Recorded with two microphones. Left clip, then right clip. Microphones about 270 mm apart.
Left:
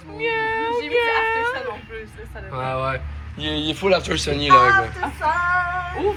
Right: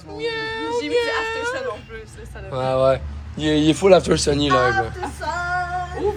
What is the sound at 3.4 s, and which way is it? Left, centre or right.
Speech, right.